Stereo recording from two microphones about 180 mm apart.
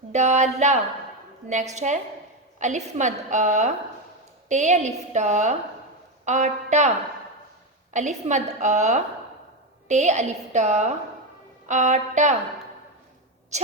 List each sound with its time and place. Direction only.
0.1 s a woman's voice: 40° right (ahead or behind)
7.9 s a woman's voice: 40° right (ahead or behind)